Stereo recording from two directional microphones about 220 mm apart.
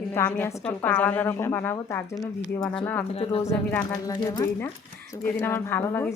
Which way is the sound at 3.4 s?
15° left (ahead or behind).